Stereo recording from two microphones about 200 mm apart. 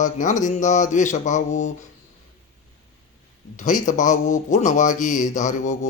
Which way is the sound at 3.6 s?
40° left (ahead or behind).